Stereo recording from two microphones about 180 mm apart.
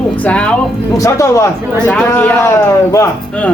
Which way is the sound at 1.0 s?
15° left (ahead or behind).